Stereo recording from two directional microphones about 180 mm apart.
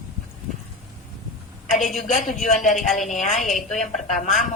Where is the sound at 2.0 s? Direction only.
45° left (ahead or behind).